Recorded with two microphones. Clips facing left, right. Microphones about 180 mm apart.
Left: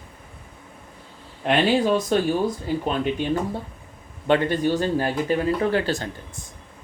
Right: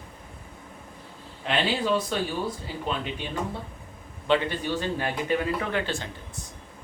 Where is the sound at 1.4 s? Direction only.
50° left (ahead or behind).